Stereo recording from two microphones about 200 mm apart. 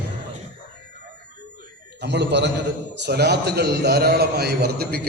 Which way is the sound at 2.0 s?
60° right (ahead or behind).